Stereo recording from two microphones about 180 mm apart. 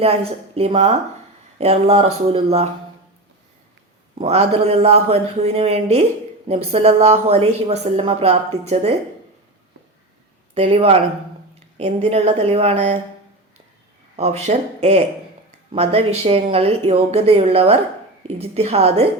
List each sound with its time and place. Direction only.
0.0 s speech: 35° right (ahead or behind)
4.1 s speech: 35° right (ahead or behind)
10.5 s speech: 35° right (ahead or behind)
14.2 s speech: 35° right (ahead or behind)